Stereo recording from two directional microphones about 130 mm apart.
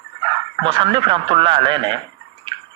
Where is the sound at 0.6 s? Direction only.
45° right (ahead or behind).